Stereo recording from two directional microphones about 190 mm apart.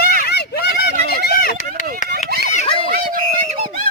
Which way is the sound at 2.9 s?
50° right (ahead or behind).